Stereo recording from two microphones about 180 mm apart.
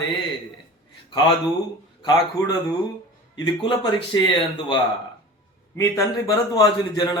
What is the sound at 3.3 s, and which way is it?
Speech, 25° left (ahead or behind).